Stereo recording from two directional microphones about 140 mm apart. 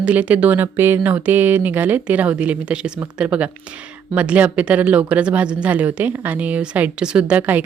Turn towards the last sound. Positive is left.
turn(degrees=-10)  # may be behind; listen again after turning